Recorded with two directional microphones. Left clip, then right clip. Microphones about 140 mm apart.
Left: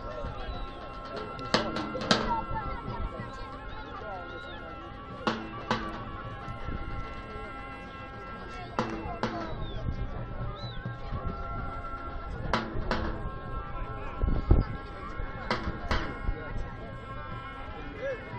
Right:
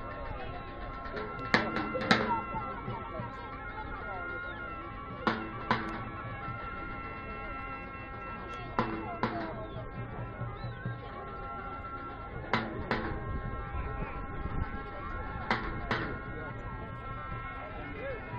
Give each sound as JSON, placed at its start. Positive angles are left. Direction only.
{"t": 1.1, "sound": "music", "side_deg": -30}
{"t": 5.2, "sound": "music", "side_deg": -30}
{"t": 8.7, "sound": "music", "side_deg": -35}
{"t": 12.4, "sound": "music", "side_deg": -35}
{"t": 15.4, "sound": "music", "side_deg": -35}